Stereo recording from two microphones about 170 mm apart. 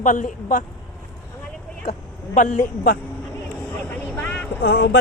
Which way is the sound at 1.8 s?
45° left (ahead or behind).